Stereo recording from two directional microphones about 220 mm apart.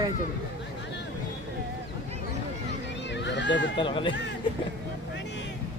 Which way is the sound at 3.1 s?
55° left (ahead or behind).